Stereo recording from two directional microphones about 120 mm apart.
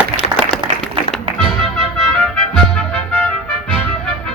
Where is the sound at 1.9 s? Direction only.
5° left (ahead or behind).